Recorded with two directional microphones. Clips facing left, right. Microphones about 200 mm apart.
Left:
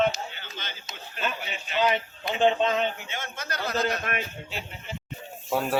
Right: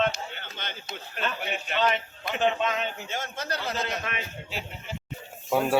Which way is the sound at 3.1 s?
40° right (ahead or behind).